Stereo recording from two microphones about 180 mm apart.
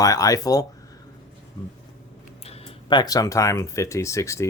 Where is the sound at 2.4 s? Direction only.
35° left (ahead or behind).